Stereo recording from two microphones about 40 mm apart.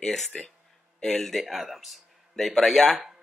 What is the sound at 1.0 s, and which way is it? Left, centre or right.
Speech, centre.